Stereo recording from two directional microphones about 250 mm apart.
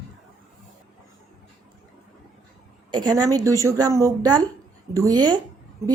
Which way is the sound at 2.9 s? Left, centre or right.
Centre.